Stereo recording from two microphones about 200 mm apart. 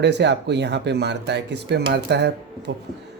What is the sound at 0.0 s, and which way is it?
Speech, 60° right (ahead or behind).